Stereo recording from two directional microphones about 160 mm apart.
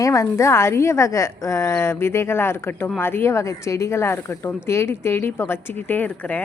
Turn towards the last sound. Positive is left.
turn(degrees=10)  # may be behind; listen again after turning